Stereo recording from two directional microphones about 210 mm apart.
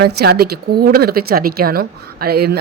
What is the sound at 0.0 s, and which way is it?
Speech, 50° right (ahead or behind).